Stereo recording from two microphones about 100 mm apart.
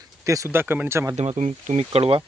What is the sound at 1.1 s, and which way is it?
Speech, 90° right.